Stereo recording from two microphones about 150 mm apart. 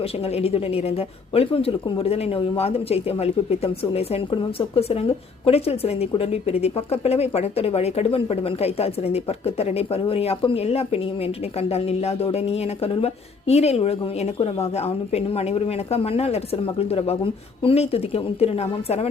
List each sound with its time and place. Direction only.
0.3 s a woman's voice: 40° left (ahead or behind)